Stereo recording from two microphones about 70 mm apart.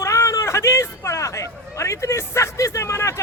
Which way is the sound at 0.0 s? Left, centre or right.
Left.